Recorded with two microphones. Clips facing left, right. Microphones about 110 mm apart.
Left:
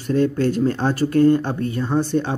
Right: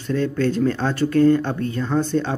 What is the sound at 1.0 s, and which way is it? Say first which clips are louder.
Speech: even; 40° left (ahead or behind).